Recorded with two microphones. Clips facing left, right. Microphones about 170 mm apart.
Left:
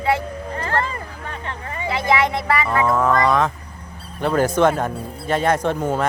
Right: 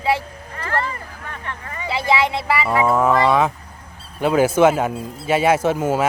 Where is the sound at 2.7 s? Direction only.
10° right (ahead or behind).